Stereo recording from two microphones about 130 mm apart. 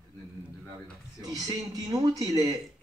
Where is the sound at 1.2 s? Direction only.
30° right (ahead or behind).